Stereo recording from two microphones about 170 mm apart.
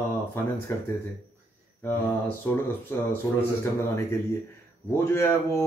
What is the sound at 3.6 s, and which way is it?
Speech, 15° left (ahead or behind).